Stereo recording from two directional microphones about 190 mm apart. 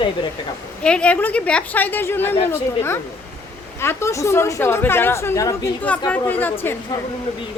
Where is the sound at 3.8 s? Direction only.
15° left (ahead or behind).